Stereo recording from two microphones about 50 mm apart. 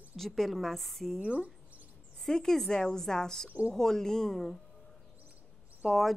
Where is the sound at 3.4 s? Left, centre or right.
Right.